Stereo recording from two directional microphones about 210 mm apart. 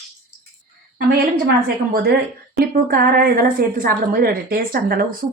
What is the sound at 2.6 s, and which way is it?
A woman's voice, 45° right (ahead or behind).